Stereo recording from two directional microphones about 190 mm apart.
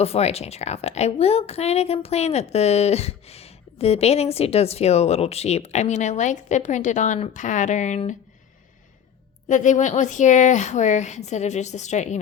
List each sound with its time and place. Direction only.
0.0 s a woman's voice: 35° left (ahead or behind)
9.5 s a woman's voice: 40° left (ahead or behind)